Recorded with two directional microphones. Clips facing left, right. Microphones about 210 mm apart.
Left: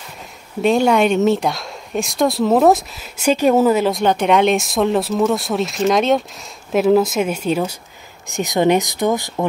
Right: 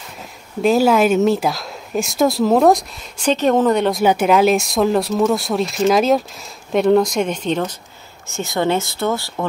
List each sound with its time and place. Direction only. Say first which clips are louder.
0.6 s speech: right 1 dB; centre (ahead or behind)
4.0 s speech: right 1 dB; 5° right (ahead or behind); by 9.5 s 15° left (ahead or behind)